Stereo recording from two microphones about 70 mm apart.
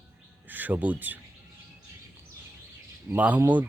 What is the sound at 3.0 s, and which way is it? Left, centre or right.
Speech, right.